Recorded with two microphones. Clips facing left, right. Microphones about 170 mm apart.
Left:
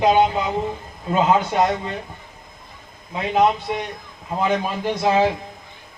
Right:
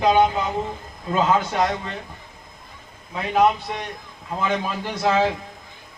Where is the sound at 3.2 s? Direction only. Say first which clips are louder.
Left 1 dB; 20° left (ahead or behind).